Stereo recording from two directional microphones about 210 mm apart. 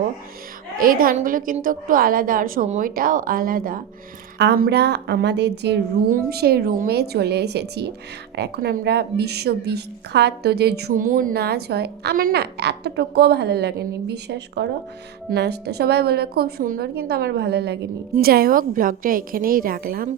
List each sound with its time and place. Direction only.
0.8 s a woman's voice: 40° right (ahead or behind)